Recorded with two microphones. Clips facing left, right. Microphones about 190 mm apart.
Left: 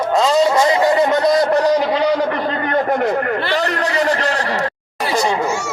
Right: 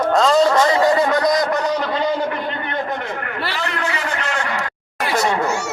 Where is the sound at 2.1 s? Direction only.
90° left.